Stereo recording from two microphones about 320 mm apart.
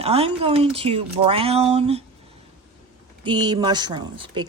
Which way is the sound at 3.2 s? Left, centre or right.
Centre.